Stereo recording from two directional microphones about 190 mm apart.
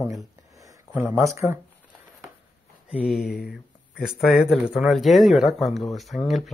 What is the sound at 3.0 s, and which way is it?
Speech, centre (ahead or behind).